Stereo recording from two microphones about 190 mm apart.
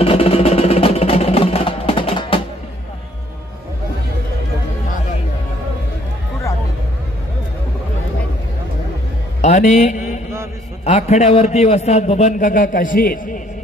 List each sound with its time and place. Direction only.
0.0 s music: 30° left (ahead or behind)
9.4 s mantra: 40° left (ahead or behind)
10.9 s a man's voice: 35° left (ahead or behind)